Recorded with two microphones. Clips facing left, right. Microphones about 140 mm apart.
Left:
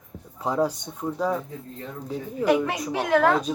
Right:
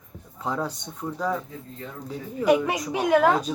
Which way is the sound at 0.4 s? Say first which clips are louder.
Left 5 dB; 10° left (ahead or behind).